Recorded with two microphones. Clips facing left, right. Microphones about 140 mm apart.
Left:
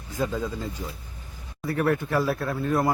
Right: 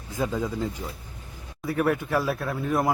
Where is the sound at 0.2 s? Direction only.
15° right (ahead or behind).